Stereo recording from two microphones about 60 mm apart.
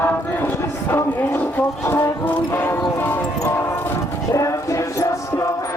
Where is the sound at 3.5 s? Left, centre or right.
Left.